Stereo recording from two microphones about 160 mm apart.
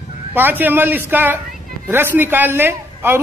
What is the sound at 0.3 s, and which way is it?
A man's voice, 10° right (ahead or behind).